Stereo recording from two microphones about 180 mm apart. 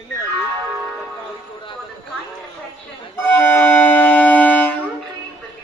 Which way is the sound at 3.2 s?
10° left (ahead or behind).